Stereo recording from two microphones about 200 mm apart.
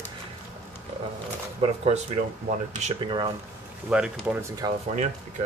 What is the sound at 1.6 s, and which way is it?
Speech, 30° right (ahead or behind).